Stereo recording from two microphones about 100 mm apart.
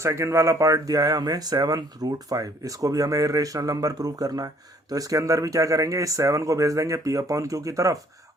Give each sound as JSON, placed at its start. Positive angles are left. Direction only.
{"t": 0.0, "sound": "speech", "side_deg": -30}